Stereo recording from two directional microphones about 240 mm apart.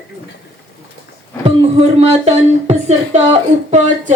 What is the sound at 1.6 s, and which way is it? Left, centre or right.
Music, right.